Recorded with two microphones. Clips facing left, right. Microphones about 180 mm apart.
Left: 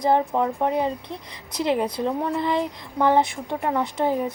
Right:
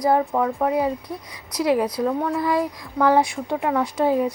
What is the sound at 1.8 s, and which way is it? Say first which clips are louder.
Speech: right 2 dB; 25° left (ahead or behind).